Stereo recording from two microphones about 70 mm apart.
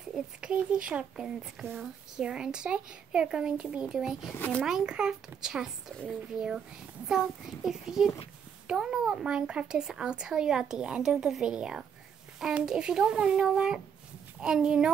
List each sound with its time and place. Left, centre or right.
0.1 s a child's voice: centre
4.3 s a child's voice: left
4.6 s a child's voice: centre
7.1 s a child's voice: centre